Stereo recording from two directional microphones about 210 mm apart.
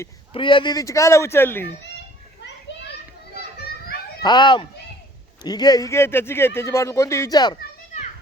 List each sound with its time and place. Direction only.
0.3 s speech: 25° left (ahead or behind)
2.4 s children playing: 55° left (ahead or behind)
4.2 s speech: 20° left (ahead or behind)